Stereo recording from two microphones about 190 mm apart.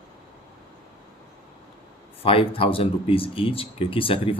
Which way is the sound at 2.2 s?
30° left (ahead or behind).